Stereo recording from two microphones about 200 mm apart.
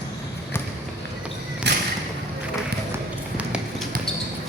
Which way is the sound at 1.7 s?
60° right (ahead or behind).